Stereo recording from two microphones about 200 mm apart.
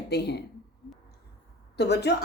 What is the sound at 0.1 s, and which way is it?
Speech, 55° left (ahead or behind).